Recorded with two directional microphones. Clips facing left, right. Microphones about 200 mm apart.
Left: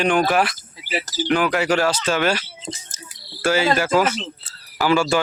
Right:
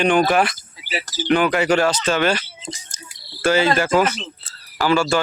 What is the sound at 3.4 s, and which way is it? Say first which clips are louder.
Cricket: right 2 dB; 5° left (ahead or behind).